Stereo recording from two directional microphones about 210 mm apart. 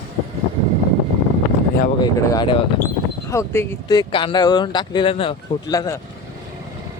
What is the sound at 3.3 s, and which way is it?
Speech, 15° left (ahead or behind).